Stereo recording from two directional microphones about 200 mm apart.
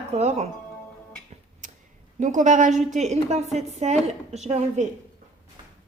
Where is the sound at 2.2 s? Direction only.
40° right (ahead or behind).